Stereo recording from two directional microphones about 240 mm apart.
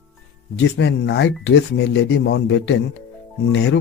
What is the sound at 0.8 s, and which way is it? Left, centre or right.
Speech, left.